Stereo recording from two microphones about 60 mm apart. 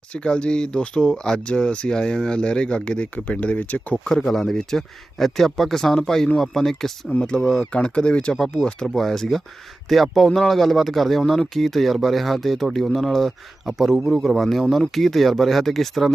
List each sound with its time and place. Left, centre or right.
0.1 s speech: centre
4.0 s speech: centre